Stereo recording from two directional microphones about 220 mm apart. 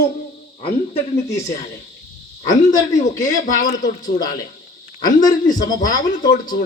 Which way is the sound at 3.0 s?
35° left (ahead or behind).